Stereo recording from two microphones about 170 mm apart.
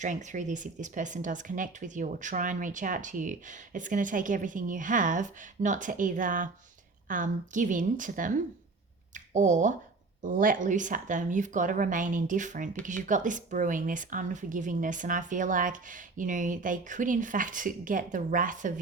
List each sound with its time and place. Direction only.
0.0 s speech: 45° right (ahead or behind)